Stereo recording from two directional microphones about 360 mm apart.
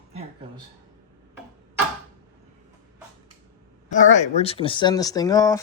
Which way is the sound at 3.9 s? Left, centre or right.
Centre.